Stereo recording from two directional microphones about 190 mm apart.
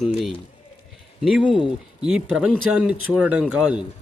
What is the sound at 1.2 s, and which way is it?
Speech, 5° right (ahead or behind).